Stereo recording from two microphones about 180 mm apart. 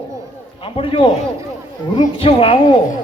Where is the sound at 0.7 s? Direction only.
30° left (ahead or behind).